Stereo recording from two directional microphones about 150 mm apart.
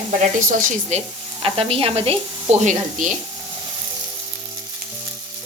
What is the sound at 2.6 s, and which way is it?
Speech, 60° right (ahead or behind).